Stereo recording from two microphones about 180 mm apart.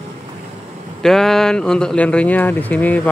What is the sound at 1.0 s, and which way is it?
Speech, centre (ahead or behind).